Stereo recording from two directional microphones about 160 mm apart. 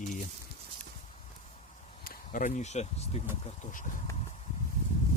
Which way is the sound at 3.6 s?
55° left (ahead or behind).